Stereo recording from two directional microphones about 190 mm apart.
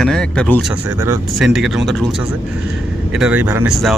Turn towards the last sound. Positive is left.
turn(degrees=-10)  # may be behind; listen again after turning